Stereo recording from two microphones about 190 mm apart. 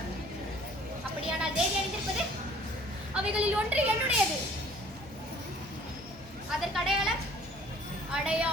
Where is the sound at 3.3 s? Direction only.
10° right (ahead or behind).